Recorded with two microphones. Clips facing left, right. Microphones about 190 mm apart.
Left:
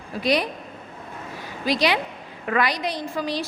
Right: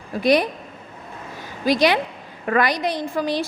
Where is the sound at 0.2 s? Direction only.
50° right (ahead or behind).